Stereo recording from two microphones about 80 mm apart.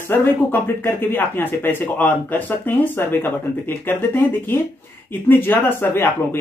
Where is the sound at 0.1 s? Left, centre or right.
Left.